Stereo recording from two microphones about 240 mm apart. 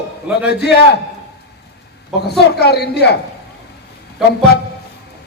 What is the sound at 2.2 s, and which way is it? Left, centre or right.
A woman's voice, left.